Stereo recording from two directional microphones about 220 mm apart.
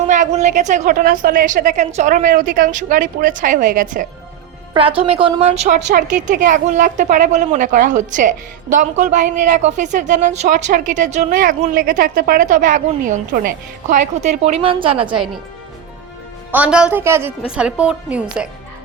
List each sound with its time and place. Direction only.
0.1 s a woman's voice: 35° right (ahead or behind)
4.7 s a woman's voice: 25° right (ahead or behind)
16.5 s a woman's voice: 5° right (ahead or behind)